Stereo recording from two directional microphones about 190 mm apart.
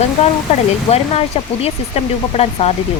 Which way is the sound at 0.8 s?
35° left (ahead or behind).